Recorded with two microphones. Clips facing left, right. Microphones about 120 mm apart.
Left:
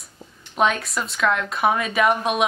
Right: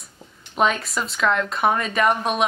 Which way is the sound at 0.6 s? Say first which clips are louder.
Even; centre (ahead or behind).